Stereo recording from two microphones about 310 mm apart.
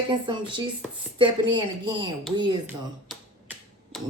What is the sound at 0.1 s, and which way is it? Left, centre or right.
Speech, centre.